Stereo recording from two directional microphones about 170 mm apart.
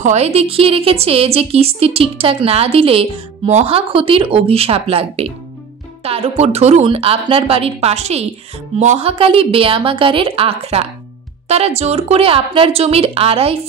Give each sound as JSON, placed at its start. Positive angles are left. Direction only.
{"t": 0.0, "sound": "a woman's voice", "side_deg": -40}